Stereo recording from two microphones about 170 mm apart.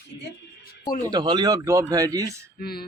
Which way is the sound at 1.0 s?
25° right (ahead or behind).